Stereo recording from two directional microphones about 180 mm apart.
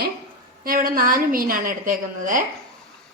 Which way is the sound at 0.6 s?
55° right (ahead or behind).